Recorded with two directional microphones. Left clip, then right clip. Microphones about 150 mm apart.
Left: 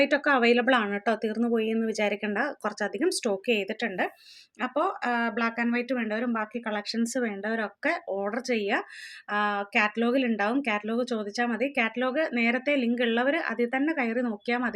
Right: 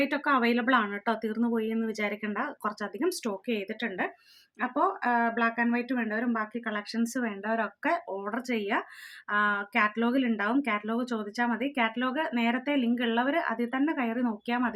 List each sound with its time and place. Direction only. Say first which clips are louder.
0.0 s speech: left 4 dB; 15° left (ahead or behind)